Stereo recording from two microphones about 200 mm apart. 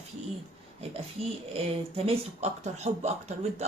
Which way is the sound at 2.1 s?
35° right (ahead or behind).